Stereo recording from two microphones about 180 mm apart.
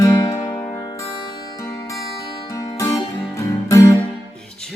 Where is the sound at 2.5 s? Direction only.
20° left (ahead or behind).